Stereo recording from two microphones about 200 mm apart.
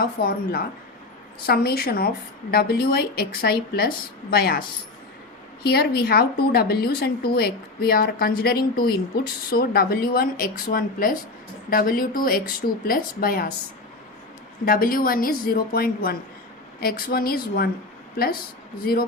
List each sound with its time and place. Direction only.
0.2 s a woman's voice: 50° left (ahead or behind)
1.5 s a woman's voice: 50° left (ahead or behind)
5.6 s a woman's voice: 50° left (ahead or behind)
14.6 s a woman's voice: 45° left (ahead or behind)
18.8 s a woman's voice: 50° left (ahead or behind)